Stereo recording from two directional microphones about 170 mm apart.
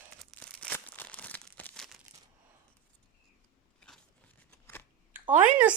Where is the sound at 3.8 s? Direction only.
5° left (ahead or behind).